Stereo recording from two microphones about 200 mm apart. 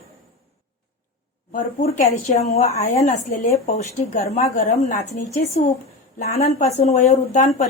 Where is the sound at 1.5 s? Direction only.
40° left (ahead or behind).